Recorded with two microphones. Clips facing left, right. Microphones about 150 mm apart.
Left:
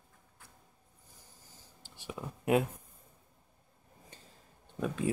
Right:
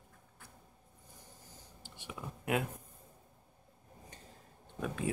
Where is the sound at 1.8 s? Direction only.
35° left (ahead or behind).